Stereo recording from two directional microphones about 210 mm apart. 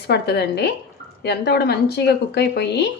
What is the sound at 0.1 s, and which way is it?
A woman's voice, 50° left (ahead or behind).